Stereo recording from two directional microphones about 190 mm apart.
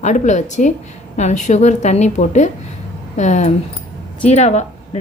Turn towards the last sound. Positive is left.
turn(degrees=35)  # may be behind; listen again after turning